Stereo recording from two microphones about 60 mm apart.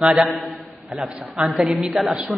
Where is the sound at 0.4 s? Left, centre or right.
Centre.